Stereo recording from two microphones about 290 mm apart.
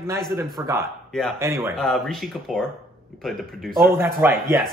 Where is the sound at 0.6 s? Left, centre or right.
Centre.